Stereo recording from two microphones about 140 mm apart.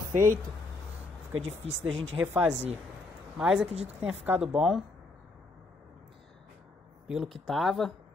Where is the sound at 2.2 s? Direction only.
15° right (ahead or behind).